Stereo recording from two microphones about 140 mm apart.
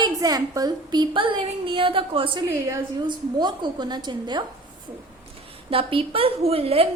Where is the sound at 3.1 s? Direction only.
30° right (ahead or behind).